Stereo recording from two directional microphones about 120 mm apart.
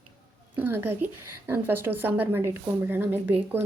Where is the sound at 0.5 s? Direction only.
20° right (ahead or behind).